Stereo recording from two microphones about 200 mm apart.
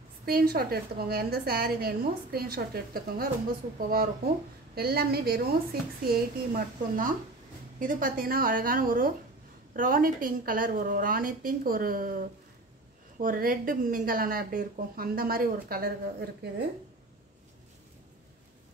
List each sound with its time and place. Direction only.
0.2 s speech: 50° right (ahead or behind)
4.7 s speech: 50° right (ahead or behind)
13.2 s speech: 45° right (ahead or behind)